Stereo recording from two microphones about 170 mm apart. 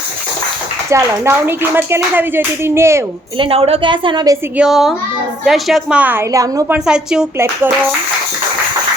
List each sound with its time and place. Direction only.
0.9 s speech: 15° right (ahead or behind)
3.3 s a woman's voice: 30° right (ahead or behind)
4.5 s a woman's voice: 5° right (ahead or behind); by 6.7 s 20° right (ahead or behind)
6.7 s a woman's voice: 5° right (ahead or behind)
7.3 s speech: 15° right (ahead or behind)